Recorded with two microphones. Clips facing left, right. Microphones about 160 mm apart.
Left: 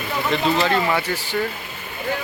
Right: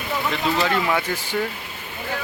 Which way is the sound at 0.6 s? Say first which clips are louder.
Left 1 dB; 10° right (ahead or behind).